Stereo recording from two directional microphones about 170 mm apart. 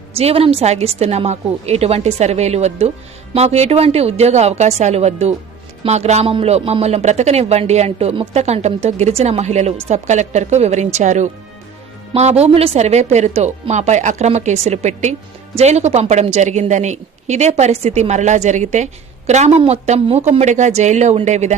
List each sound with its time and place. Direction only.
0.2 s speech: 35° right (ahead or behind)